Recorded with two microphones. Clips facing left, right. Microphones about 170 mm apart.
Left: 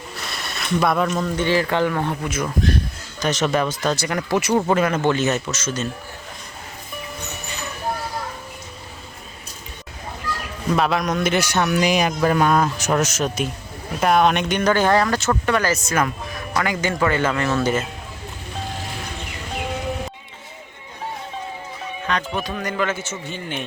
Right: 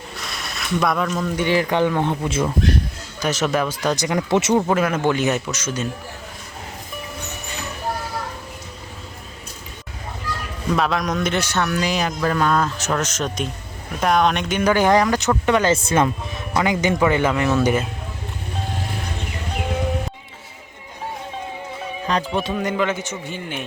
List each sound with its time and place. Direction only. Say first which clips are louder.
0.2 s a sound: left 1 dB; centre (ahead or behind)
1.4 s speech: right 1 dB; 15° right (ahead or behind)
3.2 s speech: even; 5° right (ahead or behind); by 4.5 s 25° right (ahead or behind)
4.6 s speech: even; 5° right (ahead or behind)
10.7 s speech: left 1 dB; 5° left (ahead or behind); by 17.8 s 15° right (ahead or behind)
22.1 s speech: right 2 dB; 35° right (ahead or behind)
22.4 s speech: right 3 dB; 20° right (ahead or behind)